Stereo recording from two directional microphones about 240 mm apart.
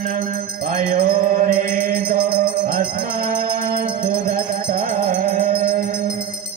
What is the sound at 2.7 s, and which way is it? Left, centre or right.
Music, right.